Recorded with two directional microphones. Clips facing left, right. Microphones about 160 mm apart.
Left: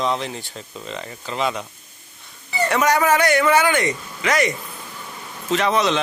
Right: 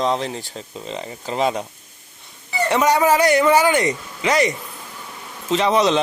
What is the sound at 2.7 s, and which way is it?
A man's voice, 25° right (ahead or behind).